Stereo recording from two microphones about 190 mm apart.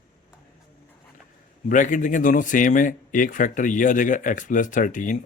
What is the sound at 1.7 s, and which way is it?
Speech, 40° left (ahead or behind).